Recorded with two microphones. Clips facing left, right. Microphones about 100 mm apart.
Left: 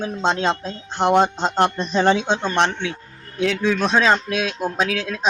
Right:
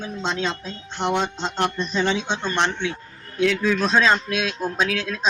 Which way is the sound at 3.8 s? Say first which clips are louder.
Left 2 dB; 60° left (ahead or behind).